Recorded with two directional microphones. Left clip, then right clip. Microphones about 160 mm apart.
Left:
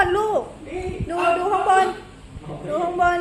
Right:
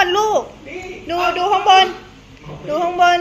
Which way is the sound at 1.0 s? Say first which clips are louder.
Right 4 dB; 35° right (ahead or behind).